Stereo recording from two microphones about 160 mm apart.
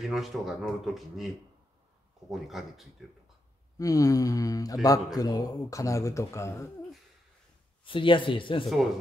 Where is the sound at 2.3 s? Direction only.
Centre (ahead or behind).